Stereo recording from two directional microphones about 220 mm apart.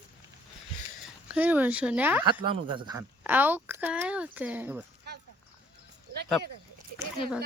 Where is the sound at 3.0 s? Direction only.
10° right (ahead or behind).